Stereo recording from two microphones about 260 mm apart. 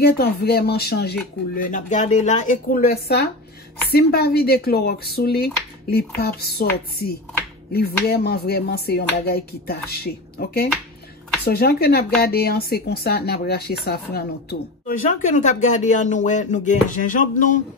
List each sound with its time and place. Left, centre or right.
0.0 s speech: left